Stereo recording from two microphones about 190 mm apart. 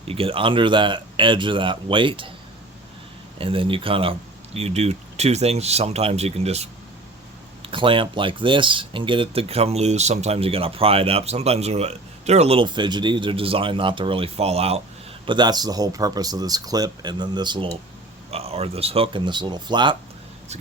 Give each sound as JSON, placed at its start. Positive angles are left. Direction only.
{"t": 0.1, "sound": "speech", "side_deg": -30}
{"t": 3.3, "sound": "speech", "side_deg": -30}
{"t": 15.3, "sound": "speech", "side_deg": -20}